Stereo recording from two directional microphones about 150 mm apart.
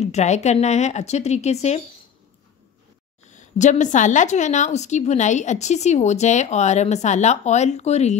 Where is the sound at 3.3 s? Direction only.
55° left (ahead or behind).